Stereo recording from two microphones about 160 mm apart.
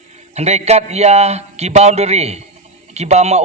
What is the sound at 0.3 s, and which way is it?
A man's voice, 40° right (ahead or behind).